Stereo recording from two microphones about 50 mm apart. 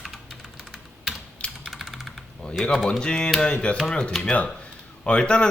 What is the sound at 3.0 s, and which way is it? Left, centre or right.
Speech, centre.